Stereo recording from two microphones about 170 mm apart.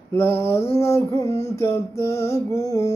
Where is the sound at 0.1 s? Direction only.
15° left (ahead or behind).